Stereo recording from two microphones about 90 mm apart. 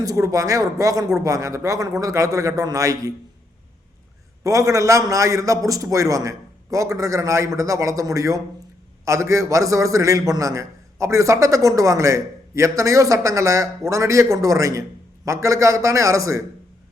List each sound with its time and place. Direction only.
0.0 s a man's voice: 40° right (ahead or behind)
4.4 s a man's voice: 35° right (ahead or behind)